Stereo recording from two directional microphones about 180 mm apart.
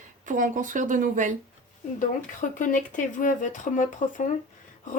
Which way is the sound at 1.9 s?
45° left (ahead or behind).